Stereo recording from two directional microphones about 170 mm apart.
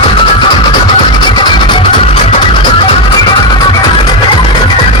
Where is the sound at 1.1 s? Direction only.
25° left (ahead or behind).